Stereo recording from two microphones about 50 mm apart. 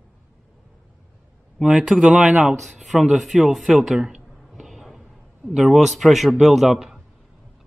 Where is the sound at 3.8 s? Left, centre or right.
Centre.